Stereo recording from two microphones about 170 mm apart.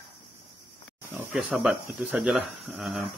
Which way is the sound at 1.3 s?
10° right (ahead or behind).